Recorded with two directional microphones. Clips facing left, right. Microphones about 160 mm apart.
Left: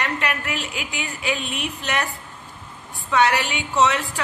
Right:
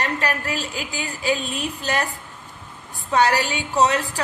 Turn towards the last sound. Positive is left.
turn(degrees=-40)  # may be behind; listen again after turning